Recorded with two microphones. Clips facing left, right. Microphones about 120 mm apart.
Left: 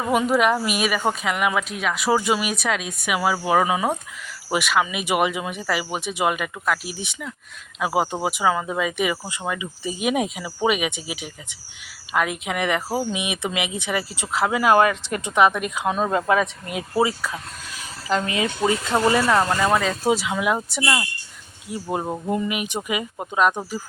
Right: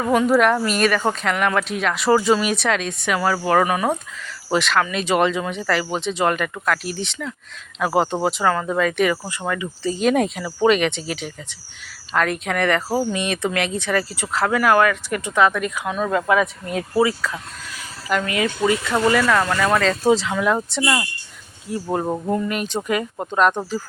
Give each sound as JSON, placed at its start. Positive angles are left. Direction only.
{"t": 0.0, "sound": "speech", "side_deg": 10}
{"t": 20.8, "sound": "speech", "side_deg": -5}
{"t": 22.3, "sound": "speech", "side_deg": 10}